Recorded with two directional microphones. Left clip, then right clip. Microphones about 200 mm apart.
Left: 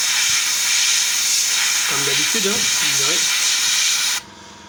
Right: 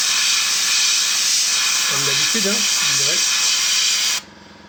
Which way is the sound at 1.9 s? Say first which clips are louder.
Even; 15° left (ahead or behind).